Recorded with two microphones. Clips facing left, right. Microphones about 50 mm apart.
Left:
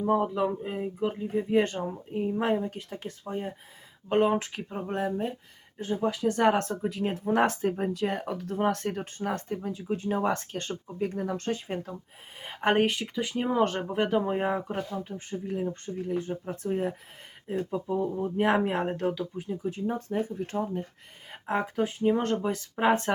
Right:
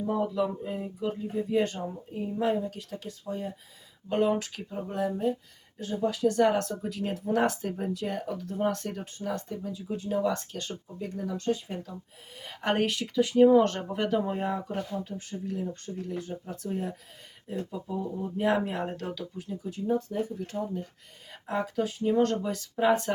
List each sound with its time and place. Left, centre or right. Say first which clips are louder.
0.1 s speech: left 3 dB; left
12.4 s speech: left 3 dB; left
18.9 s speech: left 6 dB; left
19.6 s speech: right 3 dB; left
22.8 s speech: even; left